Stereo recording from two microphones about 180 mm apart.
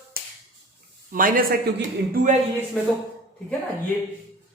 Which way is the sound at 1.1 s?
50° right (ahead or behind).